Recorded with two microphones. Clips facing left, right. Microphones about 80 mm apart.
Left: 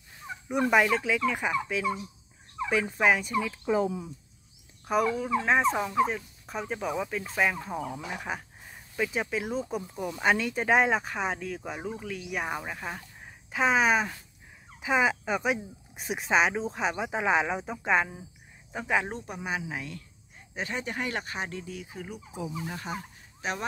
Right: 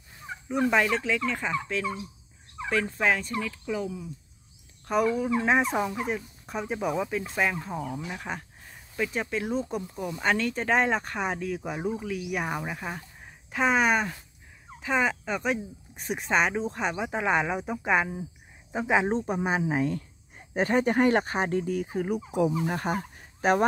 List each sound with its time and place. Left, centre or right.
0.5 s speech: centre
3.6 s speech: left
4.8 s speech: centre
18.7 s speech: centre
19.2 s speech: right